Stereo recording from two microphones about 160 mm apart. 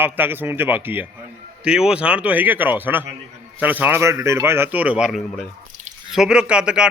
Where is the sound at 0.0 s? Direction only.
15° right (ahead or behind).